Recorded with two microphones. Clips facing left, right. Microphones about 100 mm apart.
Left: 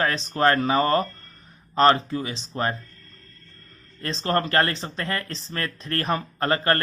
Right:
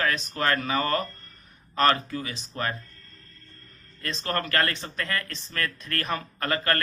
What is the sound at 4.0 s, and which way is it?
Speech, 30° left (ahead or behind).